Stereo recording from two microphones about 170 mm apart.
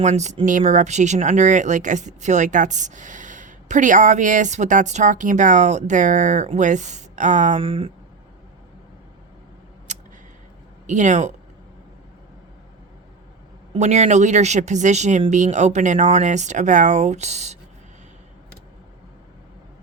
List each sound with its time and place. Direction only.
0.0 s speech: 45° right (ahead or behind)
7.6 s speech: 35° right (ahead or behind)
9.9 s a sound: 45° right (ahead or behind)
10.8 s speech: 45° right (ahead or behind)
13.7 s speech: 40° right (ahead or behind)